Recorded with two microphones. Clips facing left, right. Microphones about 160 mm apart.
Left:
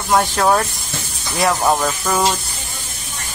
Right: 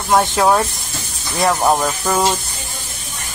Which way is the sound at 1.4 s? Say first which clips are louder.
Right 1 dB; 5° right (ahead or behind).